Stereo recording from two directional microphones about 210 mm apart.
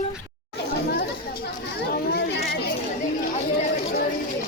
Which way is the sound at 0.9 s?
45° left (ahead or behind).